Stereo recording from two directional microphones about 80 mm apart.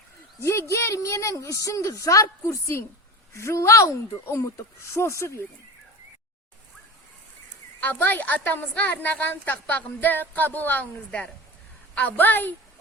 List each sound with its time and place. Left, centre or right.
0.3 s a woman's voice: left
7.8 s a woman's voice: left